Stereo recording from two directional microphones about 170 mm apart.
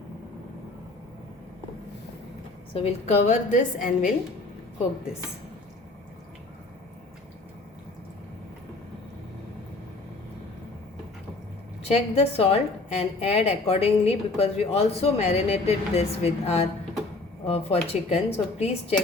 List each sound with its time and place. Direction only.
2.7 s a woman's voice: 40° left (ahead or behind)
11.8 s a woman's voice: 35° left (ahead or behind)